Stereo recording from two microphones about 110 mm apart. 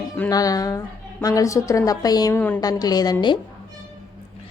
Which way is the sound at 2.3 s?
15° left (ahead or behind).